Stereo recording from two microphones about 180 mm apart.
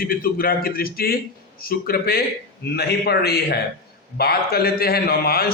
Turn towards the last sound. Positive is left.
turn(degrees=55)  # may be behind; listen again after turning